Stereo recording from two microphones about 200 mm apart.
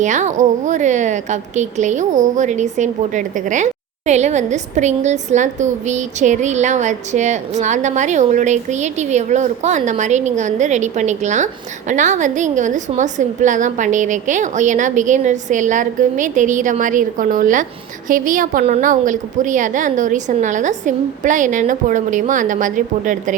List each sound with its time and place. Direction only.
0.0 s a woman's voice: 35° right (ahead or behind)